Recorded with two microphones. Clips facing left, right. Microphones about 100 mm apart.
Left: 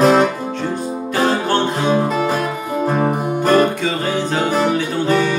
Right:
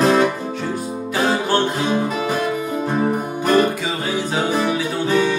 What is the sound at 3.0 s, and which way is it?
Music, 40° left (ahead or behind).